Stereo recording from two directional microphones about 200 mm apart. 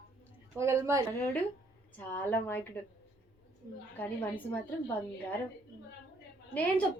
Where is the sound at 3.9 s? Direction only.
10° left (ahead or behind).